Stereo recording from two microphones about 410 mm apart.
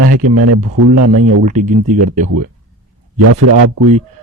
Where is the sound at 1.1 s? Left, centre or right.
Centre.